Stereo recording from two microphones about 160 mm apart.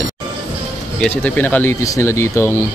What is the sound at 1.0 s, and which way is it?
Speech, 10° left (ahead or behind).